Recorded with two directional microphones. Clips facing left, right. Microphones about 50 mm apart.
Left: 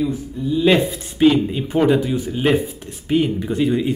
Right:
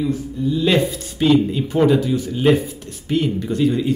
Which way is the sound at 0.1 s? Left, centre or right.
Centre.